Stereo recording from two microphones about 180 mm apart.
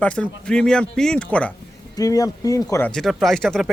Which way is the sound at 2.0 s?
20° left (ahead or behind).